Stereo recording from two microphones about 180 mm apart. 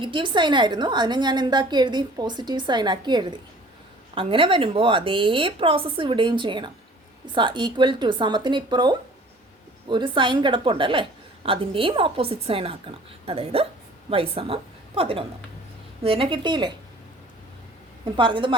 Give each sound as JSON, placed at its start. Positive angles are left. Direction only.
{"t": 0.0, "sound": "a woman's voice", "side_deg": -25}
{"t": 18.2, "sound": "a woman's voice", "side_deg": -30}